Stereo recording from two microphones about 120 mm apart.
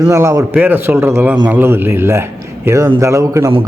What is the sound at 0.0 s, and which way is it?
Speech, 25° right (ahead or behind).